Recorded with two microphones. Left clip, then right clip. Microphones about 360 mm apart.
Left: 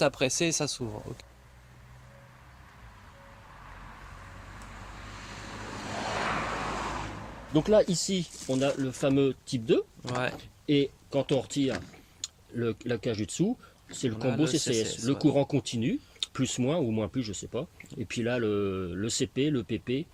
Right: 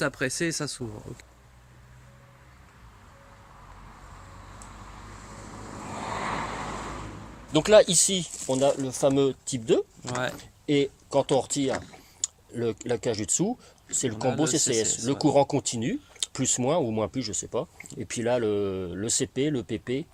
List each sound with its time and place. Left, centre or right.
0.0 s speech: centre
6.1 s a sound: left
7.5 s speech: right
8.5 s speech: right
8.9 s speech: centre
10.0 s speech: centre
10.7 s speech: centre
14.6 s speech: centre
15.1 s speech: centre